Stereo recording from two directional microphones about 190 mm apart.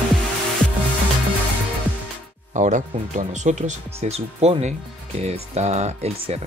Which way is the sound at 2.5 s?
40° right (ahead or behind).